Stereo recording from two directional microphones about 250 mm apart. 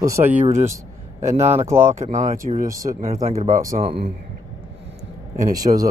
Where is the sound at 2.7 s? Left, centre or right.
Centre.